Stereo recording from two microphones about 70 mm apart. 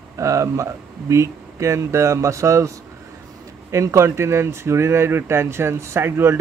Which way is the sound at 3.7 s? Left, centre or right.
Right.